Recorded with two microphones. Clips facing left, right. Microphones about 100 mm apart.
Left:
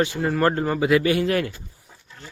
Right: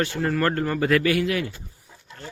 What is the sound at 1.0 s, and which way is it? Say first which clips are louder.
Speech: left 1 dB; 25° left (ahead or behind).